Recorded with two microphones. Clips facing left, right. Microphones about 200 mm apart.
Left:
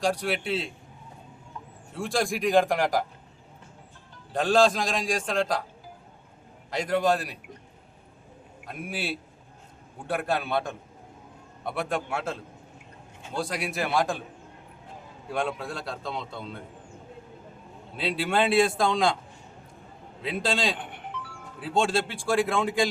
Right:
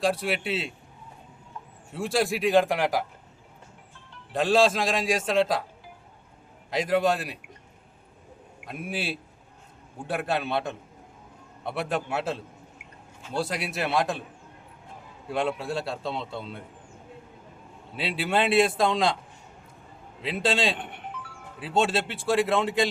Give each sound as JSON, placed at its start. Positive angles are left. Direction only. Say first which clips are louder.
{"t": 0.0, "sound": "a man's voice", "louder": "right 1 dB", "side_deg": -5}
{"t": 2.0, "sound": "a man's voice", "louder": "right 2 dB", "side_deg": -5}
{"t": 4.4, "sound": "a man's voice", "louder": "even", "side_deg": -5}
{"t": 6.8, "sound": "a man's voice", "louder": "even", "side_deg": -5}
{"t": 10.1, "sound": "a man's voice", "louder": "even", "side_deg": 0}
{"t": 15.3, "sound": "a man's voice", "louder": "right 2 dB", "side_deg": -5}
{"t": 16.0, "sound": "a man's voice", "louder": "right 3 dB", "side_deg": -30}
{"t": 18.0, "sound": "a man's voice", "louder": "left 1 dB", "side_deg": -5}
{"t": 20.2, "sound": "a man's voice", "louder": "right 2 dB", "side_deg": -5}